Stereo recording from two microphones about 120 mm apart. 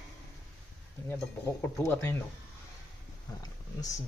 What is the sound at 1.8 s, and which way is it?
Speech, 15° left (ahead or behind).